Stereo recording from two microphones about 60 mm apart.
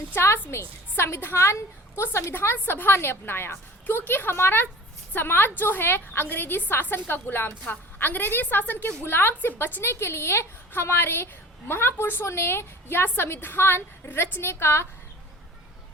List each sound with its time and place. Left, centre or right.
0.1 s a woman's voice: left